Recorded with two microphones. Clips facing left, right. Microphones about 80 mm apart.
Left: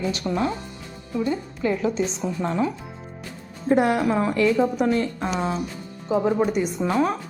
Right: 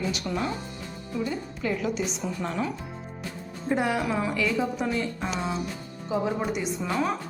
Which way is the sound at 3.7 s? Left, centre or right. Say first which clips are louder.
Left 6 dB; left.